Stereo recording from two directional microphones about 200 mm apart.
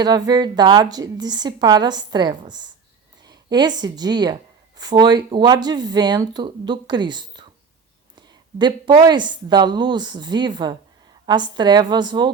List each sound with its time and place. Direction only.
0.0 s a woman's voice: 20° right (ahead or behind)